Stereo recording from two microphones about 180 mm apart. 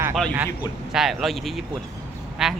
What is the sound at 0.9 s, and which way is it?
Speech, centre (ahead or behind).